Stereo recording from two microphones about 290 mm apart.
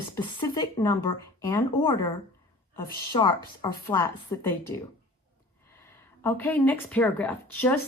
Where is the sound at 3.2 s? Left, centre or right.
Centre.